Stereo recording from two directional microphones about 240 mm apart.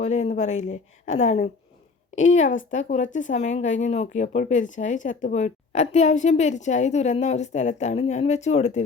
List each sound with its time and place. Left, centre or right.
0.0 s speech: left